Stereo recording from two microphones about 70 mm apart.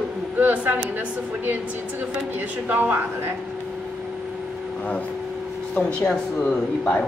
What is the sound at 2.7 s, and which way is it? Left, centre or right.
Speech, right.